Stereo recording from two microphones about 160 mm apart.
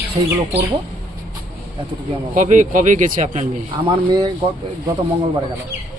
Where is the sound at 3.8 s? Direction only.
25° right (ahead or behind).